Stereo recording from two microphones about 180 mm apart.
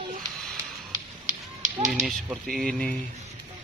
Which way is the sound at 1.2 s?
45° right (ahead or behind).